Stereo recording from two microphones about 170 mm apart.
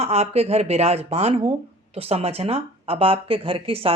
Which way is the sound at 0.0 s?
40° right (ahead or behind).